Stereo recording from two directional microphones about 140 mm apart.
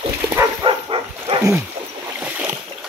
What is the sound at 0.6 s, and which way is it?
Dog, 35° right (ahead or behind).